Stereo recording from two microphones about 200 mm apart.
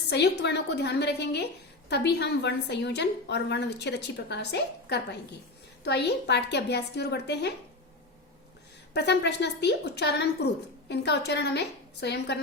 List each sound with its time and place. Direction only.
0.1 s speech: 55° left (ahead or behind)
8.9 s speech: 55° left (ahead or behind)